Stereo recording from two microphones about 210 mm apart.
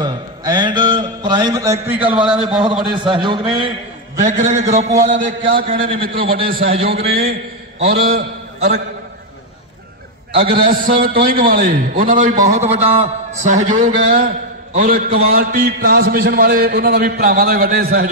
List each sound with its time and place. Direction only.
0.0 s a sound: 20° right (ahead or behind)
2.0 s a man's voice: 5° right (ahead or behind)
3.0 s a man's voice: 20° right (ahead or behind)
4.2 s a man's voice: 35° right (ahead or behind)
5.9 s a man's voice: 25° right (ahead or behind)
6.9 s a man's voice: 50° right (ahead or behind)
10.3 s a man's voice: 25° right (ahead or behind)
10.7 s a man's voice: 45° right (ahead or behind)